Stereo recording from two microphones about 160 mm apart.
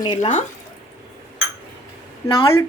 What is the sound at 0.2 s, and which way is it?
Speech, 45° left (ahead or behind).